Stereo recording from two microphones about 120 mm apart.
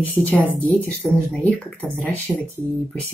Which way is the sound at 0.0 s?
10° left (ahead or behind).